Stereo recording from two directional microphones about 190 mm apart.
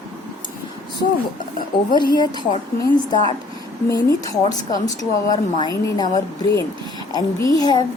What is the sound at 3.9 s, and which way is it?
Speech, 20° left (ahead or behind).